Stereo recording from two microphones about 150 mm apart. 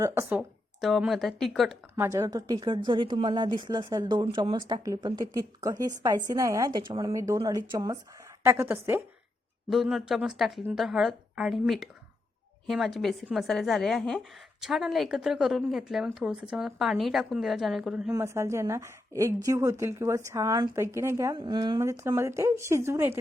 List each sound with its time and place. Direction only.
0.0 s a woman's voice: 15° right (ahead or behind); by 1.8 s centre (ahead or behind)
2.0 s a woman's voice: 20° right (ahead or behind)
8.4 s a woman's voice: 15° right (ahead or behind)
9.6 s a woman's voice: centre (ahead or behind)
18.1 s a woman's voice: 20° right (ahead or behind)
21.3 s a woman's voice: 30° right (ahead or behind)